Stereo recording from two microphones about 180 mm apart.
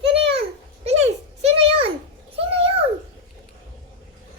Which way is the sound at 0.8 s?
35° right (ahead or behind).